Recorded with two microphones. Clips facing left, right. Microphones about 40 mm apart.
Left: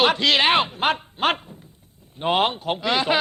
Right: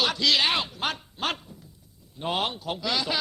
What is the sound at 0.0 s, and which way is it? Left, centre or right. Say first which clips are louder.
Speech: left 6 dB; left.